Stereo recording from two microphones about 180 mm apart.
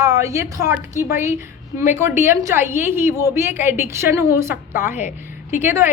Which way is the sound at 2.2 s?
15° right (ahead or behind).